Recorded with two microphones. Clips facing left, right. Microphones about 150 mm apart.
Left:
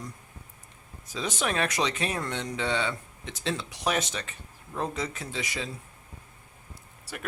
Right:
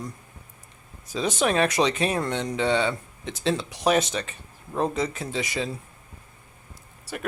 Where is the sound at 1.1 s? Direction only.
30° right (ahead or behind).